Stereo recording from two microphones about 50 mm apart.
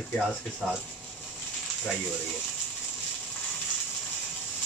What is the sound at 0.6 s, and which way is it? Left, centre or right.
Speech, centre.